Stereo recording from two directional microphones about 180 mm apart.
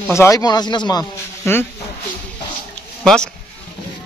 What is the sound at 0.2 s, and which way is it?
Speech, 20° left (ahead or behind).